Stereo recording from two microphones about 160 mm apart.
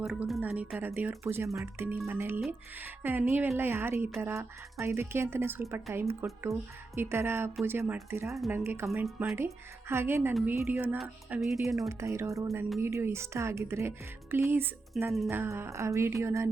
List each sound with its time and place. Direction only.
0.0 s speech: 5° right (ahead or behind)
9.0 s speech: centre (ahead or behind)
9.9 s speech: 15° right (ahead or behind)
10.9 s speech: centre (ahead or behind)
11.8 s speech: 20° right (ahead or behind)